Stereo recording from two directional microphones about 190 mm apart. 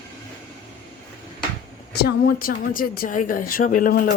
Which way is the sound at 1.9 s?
55° left (ahead or behind).